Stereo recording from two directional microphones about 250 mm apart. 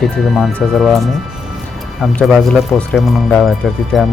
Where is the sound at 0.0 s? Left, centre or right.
Centre.